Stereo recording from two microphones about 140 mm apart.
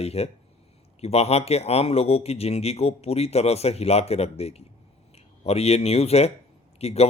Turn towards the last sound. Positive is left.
turn(degrees=50)  # may be behind; listen again after turning